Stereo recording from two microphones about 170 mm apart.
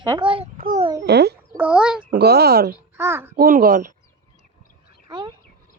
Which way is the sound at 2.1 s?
70° right (ahead or behind).